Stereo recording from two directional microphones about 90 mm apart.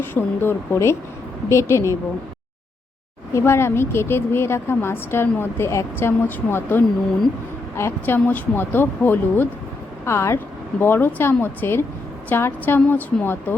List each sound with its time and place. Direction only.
0.0 s a woman's voice: 25° left (ahead or behind)
3.3 s a woman's voice: 30° left (ahead or behind)